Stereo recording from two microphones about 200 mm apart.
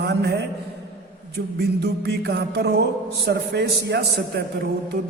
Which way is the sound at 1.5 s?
55° right (ahead or behind).